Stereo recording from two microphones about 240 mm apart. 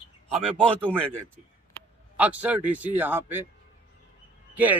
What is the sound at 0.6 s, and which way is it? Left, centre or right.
Speech, centre.